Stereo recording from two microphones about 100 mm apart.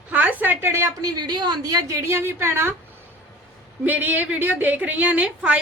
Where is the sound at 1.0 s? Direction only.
45° right (ahead or behind); by 2.8 s 25° right (ahead or behind).